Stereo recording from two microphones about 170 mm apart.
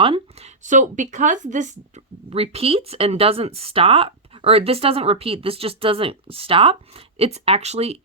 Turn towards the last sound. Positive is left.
turn(degrees=-35)  # may be behind; listen again after turning